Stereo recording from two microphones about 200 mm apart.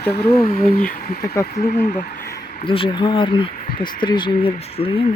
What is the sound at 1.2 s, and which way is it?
Speech, 15° left (ahead or behind).